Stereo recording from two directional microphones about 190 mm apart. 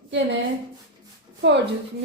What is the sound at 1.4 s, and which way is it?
Speech, 70° right (ahead or behind).